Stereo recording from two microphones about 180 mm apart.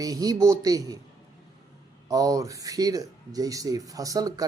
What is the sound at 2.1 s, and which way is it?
Speech, 20° right (ahead or behind).